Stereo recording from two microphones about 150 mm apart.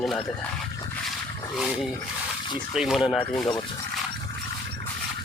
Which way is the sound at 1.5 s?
Centre (ahead or behind).